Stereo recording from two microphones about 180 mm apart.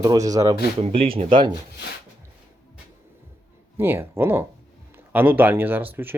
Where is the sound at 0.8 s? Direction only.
30° right (ahead or behind).